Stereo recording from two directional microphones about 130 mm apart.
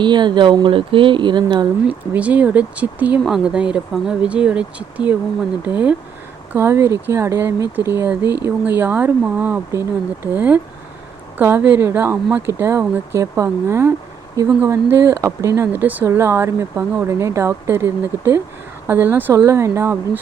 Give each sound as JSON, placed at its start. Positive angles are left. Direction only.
{"t": 0.0, "sound": "speech", "side_deg": -35}
{"t": 1.9, "sound": "speech", "side_deg": -10}